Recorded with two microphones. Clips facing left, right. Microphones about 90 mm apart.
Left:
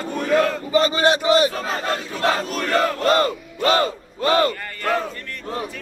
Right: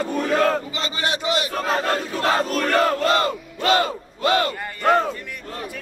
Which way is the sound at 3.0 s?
40° left (ahead or behind).